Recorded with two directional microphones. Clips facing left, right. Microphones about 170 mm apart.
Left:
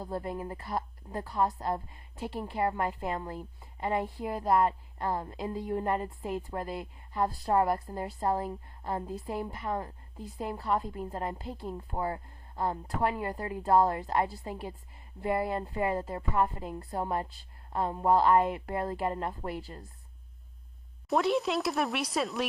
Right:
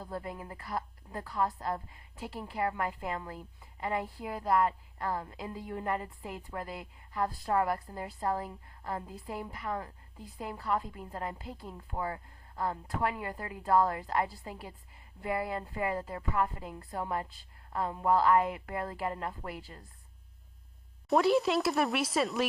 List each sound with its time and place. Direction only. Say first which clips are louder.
0.0 s a woman's voice: left 5 dB; 30° left (ahead or behind)
21.1 s speech: right 2 dB; centre (ahead or behind)